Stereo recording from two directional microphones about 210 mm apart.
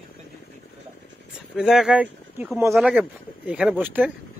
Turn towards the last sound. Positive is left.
turn(degrees=-10)  # may be behind; listen again after turning